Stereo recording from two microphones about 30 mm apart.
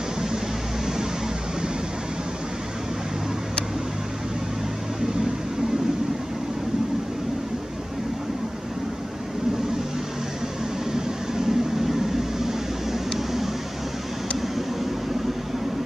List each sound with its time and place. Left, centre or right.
10.9 s vehicle: centre